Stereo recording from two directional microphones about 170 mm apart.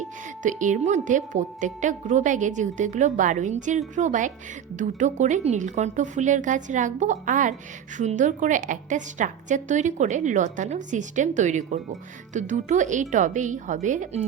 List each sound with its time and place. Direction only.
0.0 s a woman's voice: 45° right (ahead or behind)